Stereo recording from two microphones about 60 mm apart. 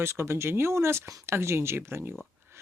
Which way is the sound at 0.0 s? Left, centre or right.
Right.